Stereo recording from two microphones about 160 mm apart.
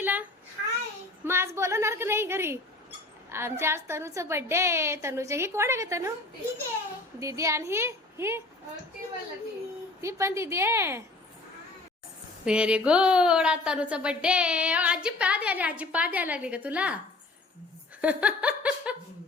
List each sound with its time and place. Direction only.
0.0 s a sound: 10° right (ahead or behind)
3.2 s a woman's voice: 15° right (ahead or behind)
7.2 s a woman's voice: 20° right (ahead or behind)
10.0 s a woman's voice: 20° right (ahead or behind)
12.5 s a woman's voice: 5° right (ahead or behind)
18.0 s laughter: 10° right (ahead or behind)